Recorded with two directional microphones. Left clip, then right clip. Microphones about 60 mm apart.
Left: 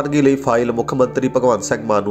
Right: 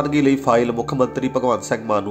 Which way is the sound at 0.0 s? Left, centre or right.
Left.